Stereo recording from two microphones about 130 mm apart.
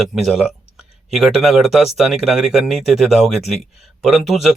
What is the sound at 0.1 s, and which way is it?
Speech, centre (ahead or behind).